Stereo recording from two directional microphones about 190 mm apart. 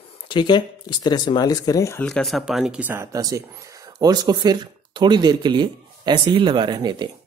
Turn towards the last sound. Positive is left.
turn(degrees=-25)  # may be behind; listen again after turning